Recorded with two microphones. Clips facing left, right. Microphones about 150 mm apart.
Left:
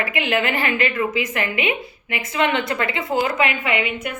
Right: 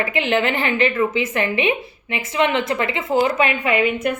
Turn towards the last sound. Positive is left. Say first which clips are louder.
# right 5 dB
turn(degrees=-40)  # may be behind; listen again after turning